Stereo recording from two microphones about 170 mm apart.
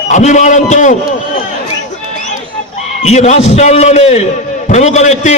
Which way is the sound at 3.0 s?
40° left (ahead or behind).